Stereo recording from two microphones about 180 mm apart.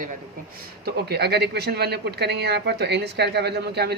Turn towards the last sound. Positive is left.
turn(degrees=-65)  # may be behind; listen again after turning